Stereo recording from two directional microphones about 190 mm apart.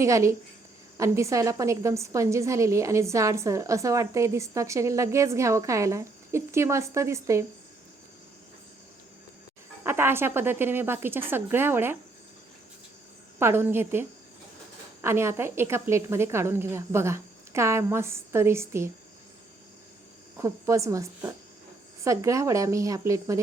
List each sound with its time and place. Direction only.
0.0 s a woman's voice: 15° right (ahead or behind)
9.8 s a woman's voice: 15° right (ahead or behind)
13.4 s a woman's voice: 15° right (ahead or behind)
20.3 s a woman's voice: 15° right (ahead or behind)